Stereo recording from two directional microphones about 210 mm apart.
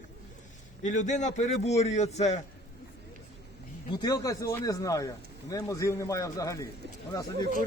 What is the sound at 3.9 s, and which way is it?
Speech, 15° left (ahead or behind).